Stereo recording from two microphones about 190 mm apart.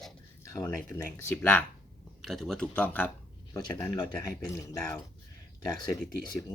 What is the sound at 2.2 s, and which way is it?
Speech, centre (ahead or behind).